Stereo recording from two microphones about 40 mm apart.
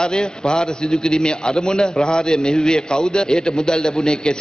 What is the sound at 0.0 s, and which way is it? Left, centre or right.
A man's voice, centre.